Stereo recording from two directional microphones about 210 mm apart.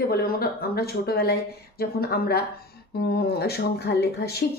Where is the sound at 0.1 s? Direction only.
45° left (ahead or behind).